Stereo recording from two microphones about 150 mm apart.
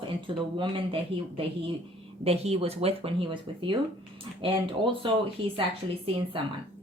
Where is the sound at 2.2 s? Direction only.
45° right (ahead or behind).